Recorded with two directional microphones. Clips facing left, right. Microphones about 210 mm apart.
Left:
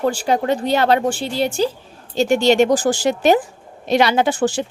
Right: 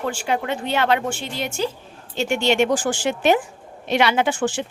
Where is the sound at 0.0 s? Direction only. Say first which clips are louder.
Left 6 dB; 35° left (ahead or behind).